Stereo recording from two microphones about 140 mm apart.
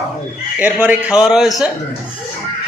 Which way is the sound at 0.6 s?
10° right (ahead or behind).